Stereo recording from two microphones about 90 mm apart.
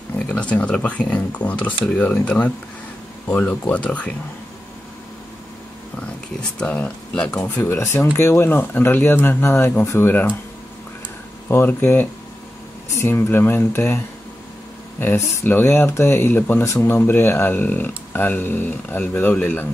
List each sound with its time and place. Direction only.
0.3 s speech: 15° left (ahead or behind)
6.6 s speech: 15° left (ahead or behind)
11.4 s speech: 25° left (ahead or behind)
15.0 s speech: 20° left (ahead or behind)